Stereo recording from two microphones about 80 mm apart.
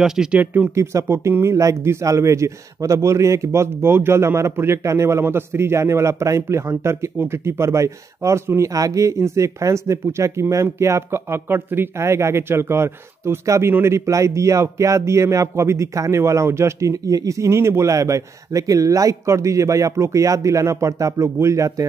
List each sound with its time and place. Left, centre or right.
0.0 s speech: centre
0.4 s speech: right
0.7 s a man's voice: right